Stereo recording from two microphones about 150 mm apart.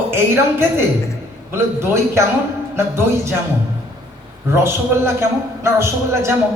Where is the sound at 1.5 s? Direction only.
15° right (ahead or behind).